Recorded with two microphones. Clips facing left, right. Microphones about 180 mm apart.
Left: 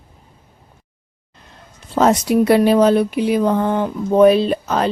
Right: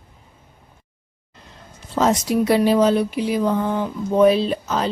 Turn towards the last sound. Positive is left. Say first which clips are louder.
# left 4 dB
turn(degrees=55)  # may be behind; listen again after turning